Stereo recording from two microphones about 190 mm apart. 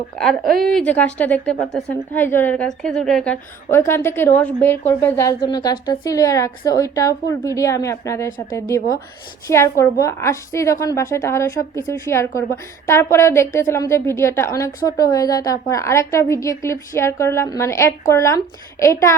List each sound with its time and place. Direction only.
0.2 s a woman's voice: centre (ahead or behind)